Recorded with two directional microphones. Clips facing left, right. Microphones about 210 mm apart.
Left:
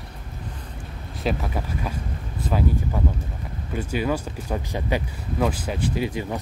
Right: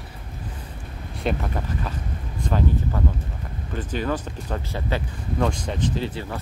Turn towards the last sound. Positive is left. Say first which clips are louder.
# left 2 dB
turn(degrees=15)  # may be behind; listen again after turning